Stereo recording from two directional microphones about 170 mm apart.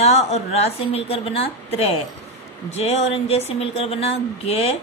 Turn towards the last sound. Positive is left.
turn(degrees=35)  # may be behind; listen again after turning